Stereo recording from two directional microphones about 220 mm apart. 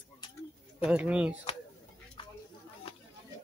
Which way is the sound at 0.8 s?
5° right (ahead or behind).